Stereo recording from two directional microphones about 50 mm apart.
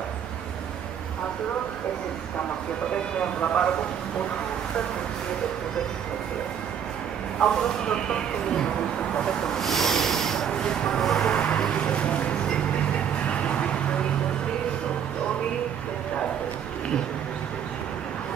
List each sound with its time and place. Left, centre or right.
3.2 s speech: left
7.3 s speech: centre
11.3 s vehicle: left
11.9 s a sound: left